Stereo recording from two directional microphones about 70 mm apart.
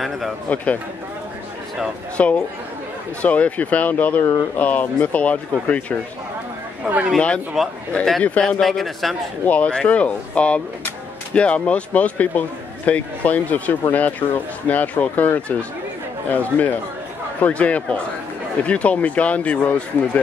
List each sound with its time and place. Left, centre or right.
0.5 s a man's voice: centre
2.2 s a man's voice: centre
6.8 s speech: right
7.2 s speech: centre
9.5 s a man's voice: centre